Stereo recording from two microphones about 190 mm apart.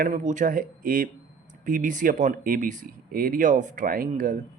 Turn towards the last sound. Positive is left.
turn(degrees=-45)  # may be behind; listen again after turning